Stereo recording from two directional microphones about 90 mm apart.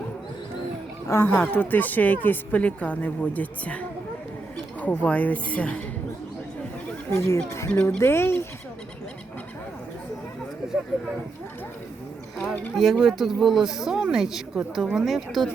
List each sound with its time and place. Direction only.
1.2 s speech: 20° left (ahead or behind)
7.1 s speech: 30° left (ahead or behind)
12.7 s speech: centre (ahead or behind)